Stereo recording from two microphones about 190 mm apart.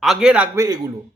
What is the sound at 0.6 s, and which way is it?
Speech, 20° right (ahead or behind).